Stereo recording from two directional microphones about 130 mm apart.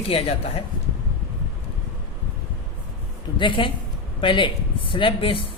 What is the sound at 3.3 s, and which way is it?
Speech, 40° left (ahead or behind).